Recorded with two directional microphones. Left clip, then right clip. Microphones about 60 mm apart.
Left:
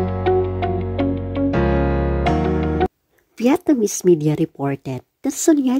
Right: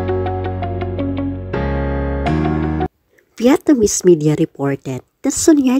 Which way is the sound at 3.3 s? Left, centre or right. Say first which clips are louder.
Right 4 dB; right.